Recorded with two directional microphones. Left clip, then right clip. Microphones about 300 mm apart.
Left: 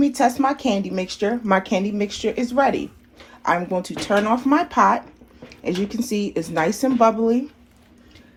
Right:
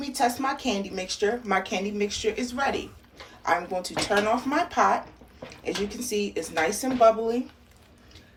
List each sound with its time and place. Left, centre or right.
0.0 s speech: centre